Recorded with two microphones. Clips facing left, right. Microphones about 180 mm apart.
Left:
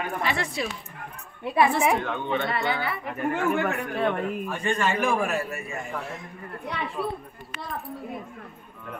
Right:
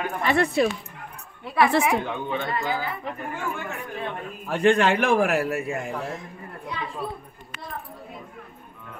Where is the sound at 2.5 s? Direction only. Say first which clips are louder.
Even; 75° left (ahead or behind).